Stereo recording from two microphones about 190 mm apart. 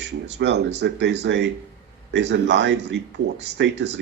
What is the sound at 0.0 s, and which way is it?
Speech, 65° right (ahead or behind).